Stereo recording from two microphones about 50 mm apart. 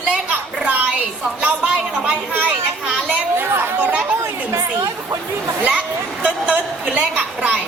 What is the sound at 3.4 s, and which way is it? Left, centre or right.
Chatter, right.